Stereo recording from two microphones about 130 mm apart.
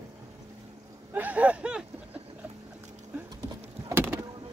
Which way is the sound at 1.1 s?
10° right (ahead or behind).